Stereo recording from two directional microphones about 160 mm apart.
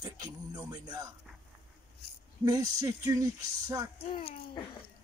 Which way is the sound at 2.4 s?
20° right (ahead or behind).